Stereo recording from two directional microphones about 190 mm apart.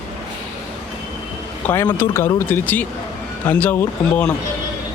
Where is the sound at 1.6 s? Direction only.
10° left (ahead or behind).